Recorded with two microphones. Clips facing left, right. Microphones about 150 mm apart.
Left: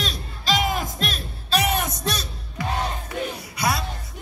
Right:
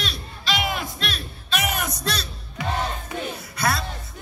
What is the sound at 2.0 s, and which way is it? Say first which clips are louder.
Speech: left 1 dB; 20° left (ahead or behind).